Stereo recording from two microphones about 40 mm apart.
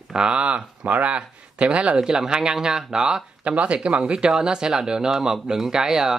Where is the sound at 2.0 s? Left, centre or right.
Centre.